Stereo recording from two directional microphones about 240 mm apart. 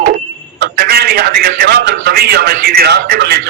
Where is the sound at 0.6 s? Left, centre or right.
Right.